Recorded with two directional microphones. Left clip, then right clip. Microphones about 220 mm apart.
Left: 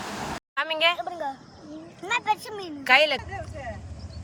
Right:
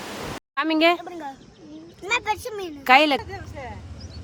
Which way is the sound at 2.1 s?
20° right (ahead or behind).